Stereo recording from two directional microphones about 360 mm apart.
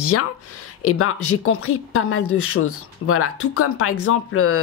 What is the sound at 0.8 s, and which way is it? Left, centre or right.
Speech, left.